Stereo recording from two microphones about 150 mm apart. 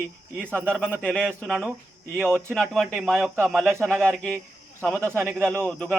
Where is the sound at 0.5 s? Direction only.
10° right (ahead or behind).